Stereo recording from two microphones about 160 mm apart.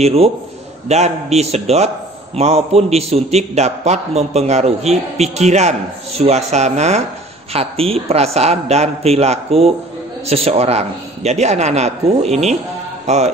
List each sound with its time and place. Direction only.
0.0 s a man's voice: 40° right (ahead or behind)